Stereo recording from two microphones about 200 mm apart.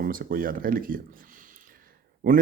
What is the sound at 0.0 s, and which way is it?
Speech, 45° right (ahead or behind).